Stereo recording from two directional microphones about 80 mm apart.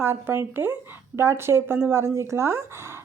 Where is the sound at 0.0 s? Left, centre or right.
Right.